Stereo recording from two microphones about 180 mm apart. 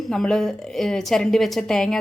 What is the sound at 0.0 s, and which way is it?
A woman's voice, centre (ahead or behind).